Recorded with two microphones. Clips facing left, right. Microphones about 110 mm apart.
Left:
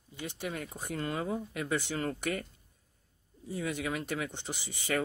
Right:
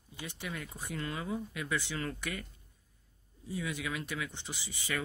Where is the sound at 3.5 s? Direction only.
40° left (ahead or behind).